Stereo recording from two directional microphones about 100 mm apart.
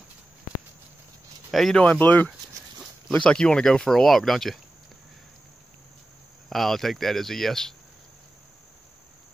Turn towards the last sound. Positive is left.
turn(degrees=5)  # may be behind; listen again after turning